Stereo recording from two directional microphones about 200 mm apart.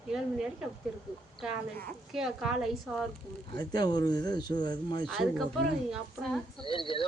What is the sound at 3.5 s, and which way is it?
Speech, 20° left (ahead or behind).